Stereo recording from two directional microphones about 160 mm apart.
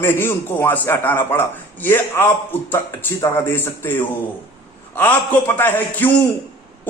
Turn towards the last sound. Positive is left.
turn(degrees=10)  # may be behind; listen again after turning